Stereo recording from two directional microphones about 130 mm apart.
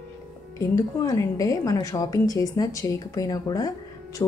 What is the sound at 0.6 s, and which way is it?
A woman's voice, 25° left (ahead or behind).